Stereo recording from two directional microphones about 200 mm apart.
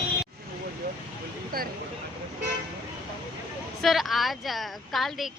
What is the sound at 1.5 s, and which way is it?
Vehicle, 45° right (ahead or behind).